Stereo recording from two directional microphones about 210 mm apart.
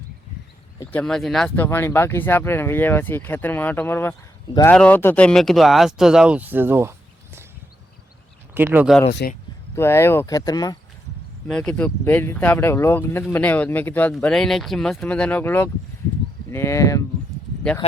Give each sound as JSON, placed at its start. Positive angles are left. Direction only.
{"t": 0.8, "sound": "speech", "side_deg": 5}
{"t": 8.5, "sound": "speech", "side_deg": -10}
{"t": 9.2, "sound": "speech", "side_deg": 45}
{"t": 9.7, "sound": "speech", "side_deg": 10}
{"t": 11.4, "sound": "speech", "side_deg": 5}